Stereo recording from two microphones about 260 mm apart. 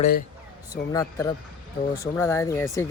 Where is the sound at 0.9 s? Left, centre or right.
Centre.